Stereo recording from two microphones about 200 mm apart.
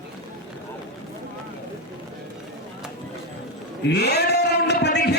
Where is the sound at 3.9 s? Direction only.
55° left (ahead or behind).